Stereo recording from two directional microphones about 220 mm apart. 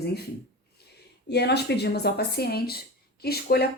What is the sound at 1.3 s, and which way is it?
A woman's voice, 50° left (ahead or behind).